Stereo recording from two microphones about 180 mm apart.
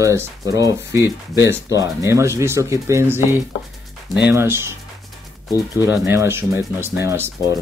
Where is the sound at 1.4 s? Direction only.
15° right (ahead or behind).